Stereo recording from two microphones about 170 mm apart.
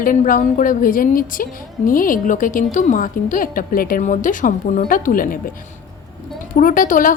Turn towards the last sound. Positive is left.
turn(degrees=55)  # may be behind; listen again after turning